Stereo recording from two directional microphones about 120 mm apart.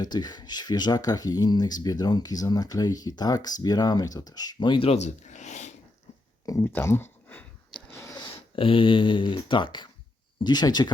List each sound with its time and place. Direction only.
0.0 s speech: 35° left (ahead or behind)
4.9 s speech: 75° left (ahead or behind)
6.4 s a sound: 25° left (ahead or behind)
8.5 s speech: 45° left (ahead or behind)